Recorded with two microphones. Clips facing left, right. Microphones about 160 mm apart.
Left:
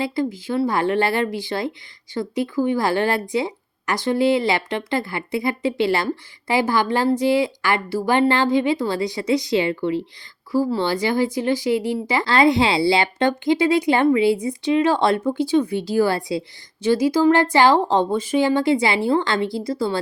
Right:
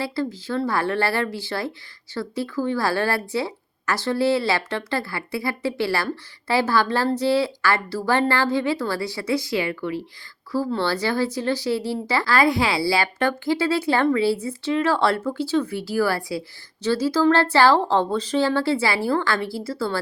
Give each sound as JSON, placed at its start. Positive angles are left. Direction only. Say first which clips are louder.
{"t": 0.0, "sound": "speech", "louder": "left 3 dB", "side_deg": 15}
{"t": 10.5, "sound": "speech", "louder": "left 3 dB", "side_deg": 15}